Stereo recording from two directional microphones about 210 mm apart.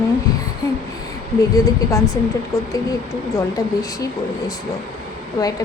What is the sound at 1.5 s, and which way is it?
A woman's voice, 15° left (ahead or behind).